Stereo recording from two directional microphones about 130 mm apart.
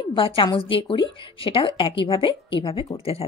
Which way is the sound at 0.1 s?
40° left (ahead or behind).